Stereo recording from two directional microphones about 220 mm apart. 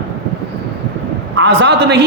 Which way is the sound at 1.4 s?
55° right (ahead or behind).